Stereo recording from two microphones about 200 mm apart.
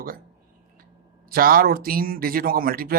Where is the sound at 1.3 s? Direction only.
45° right (ahead or behind).